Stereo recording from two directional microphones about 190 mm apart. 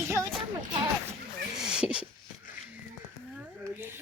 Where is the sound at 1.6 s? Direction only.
5° right (ahead or behind).